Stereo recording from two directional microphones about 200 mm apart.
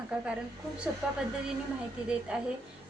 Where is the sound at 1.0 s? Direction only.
5° right (ahead or behind).